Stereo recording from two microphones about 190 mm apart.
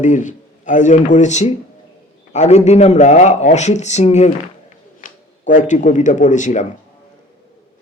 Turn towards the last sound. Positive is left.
turn(degrees=40)  # may be behind; listen again after turning